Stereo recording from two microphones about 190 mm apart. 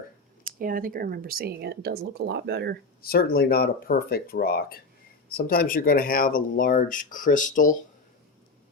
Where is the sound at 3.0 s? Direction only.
50° left (ahead or behind).